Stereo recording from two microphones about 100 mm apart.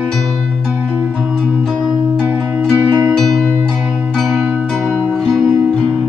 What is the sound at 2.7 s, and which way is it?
Music, 20° right (ahead or behind).